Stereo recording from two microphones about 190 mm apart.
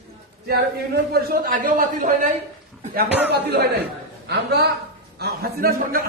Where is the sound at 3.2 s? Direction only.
60° right (ahead or behind).